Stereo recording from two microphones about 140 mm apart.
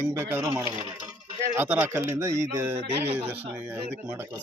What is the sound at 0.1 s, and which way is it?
Speech, 15° right (ahead or behind).